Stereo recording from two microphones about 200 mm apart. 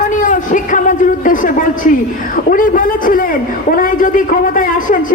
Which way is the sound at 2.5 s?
45° left (ahead or behind).